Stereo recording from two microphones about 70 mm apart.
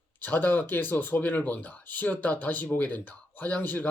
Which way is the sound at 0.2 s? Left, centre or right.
Left.